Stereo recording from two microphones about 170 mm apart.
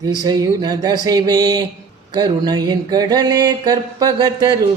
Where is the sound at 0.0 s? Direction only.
20° right (ahead or behind).